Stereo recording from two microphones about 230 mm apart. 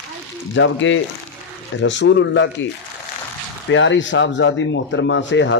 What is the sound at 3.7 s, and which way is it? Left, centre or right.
Speech, left.